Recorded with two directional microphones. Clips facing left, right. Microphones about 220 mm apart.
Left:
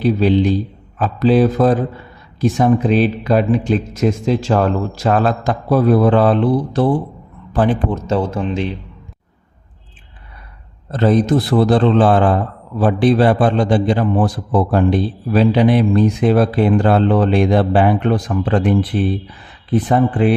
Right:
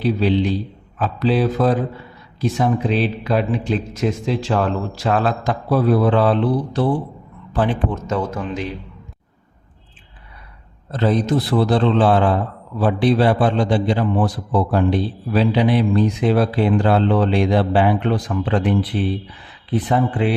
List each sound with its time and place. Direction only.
0.0 s a man's voice: 45° left (ahead or behind)
8.0 s speech: 30° left (ahead or behind)
10.9 s a man's voice: 50° left (ahead or behind)